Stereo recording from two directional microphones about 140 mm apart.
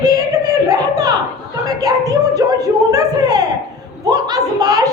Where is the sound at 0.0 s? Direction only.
25° right (ahead or behind).